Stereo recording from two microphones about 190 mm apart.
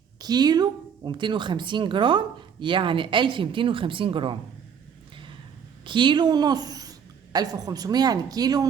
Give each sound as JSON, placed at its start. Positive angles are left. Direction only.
{"t": 0.2, "sound": "speech", "side_deg": -20}
{"t": 5.8, "sound": "a woman's voice", "side_deg": -25}